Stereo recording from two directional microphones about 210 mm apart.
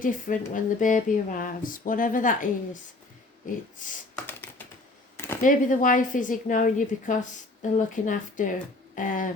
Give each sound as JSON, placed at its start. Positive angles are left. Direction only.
{"t": 0.0, "sound": "speech", "side_deg": 40}
{"t": 4.3, "sound": "typing", "side_deg": 10}
{"t": 5.1, "sound": "a sound", "side_deg": 10}
{"t": 5.4, "sound": "speech", "side_deg": 40}